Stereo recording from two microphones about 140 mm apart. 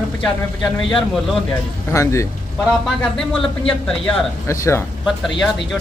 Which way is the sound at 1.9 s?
20° left (ahead or behind).